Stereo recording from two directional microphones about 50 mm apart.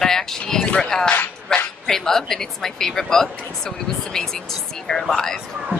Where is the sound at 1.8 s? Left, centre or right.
Centre.